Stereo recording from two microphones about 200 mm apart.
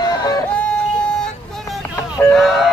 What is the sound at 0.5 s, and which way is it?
Music, 5° left (ahead or behind).